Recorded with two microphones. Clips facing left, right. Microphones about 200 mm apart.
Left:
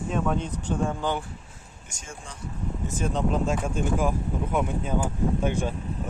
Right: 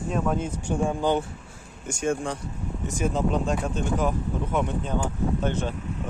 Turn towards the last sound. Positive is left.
turn(degrees=10)  # may be behind; listen again after turning